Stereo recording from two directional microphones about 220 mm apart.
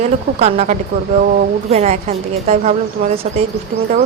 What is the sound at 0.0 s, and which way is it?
Speech, 30° right (ahead or behind).